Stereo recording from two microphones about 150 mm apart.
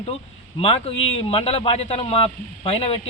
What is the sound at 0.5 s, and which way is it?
A man's voice, 40° left (ahead or behind).